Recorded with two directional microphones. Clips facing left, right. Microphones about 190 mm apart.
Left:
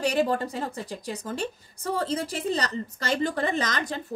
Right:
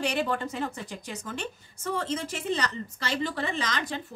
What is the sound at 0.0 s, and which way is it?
A woman's voice, 40° left (ahead or behind).